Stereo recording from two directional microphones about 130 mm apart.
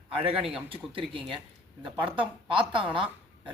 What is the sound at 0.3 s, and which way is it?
Speech, 45° right (ahead or behind).